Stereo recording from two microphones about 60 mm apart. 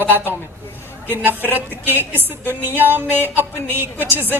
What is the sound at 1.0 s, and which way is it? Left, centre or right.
Speech, right.